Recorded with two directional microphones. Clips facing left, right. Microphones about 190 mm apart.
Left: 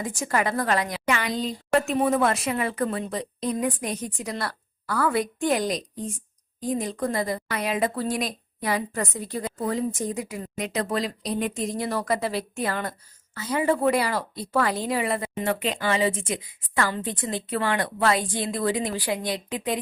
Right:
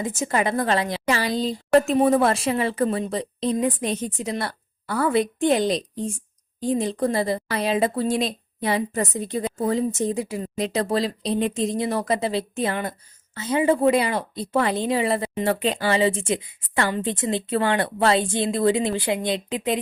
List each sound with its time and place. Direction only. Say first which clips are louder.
0.0 s a woman's voice: right 2 dB; 20° right (ahead or behind)